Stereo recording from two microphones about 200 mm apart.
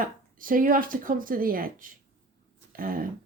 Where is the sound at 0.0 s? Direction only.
45° right (ahead or behind).